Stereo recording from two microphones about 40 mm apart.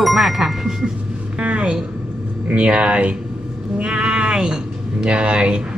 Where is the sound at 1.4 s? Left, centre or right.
Right.